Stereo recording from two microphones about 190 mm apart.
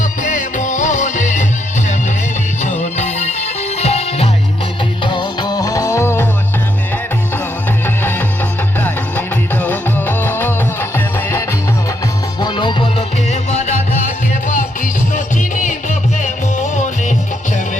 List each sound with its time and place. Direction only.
0.2 s music: 40° left (ahead or behind)
2.6 s music: 35° left (ahead or behind); by 6.2 s 15° left (ahead or behind)
8.8 s music: 10° left (ahead or behind)
12.4 s music: 25° left (ahead or behind)
15.1 s music: 40° left (ahead or behind)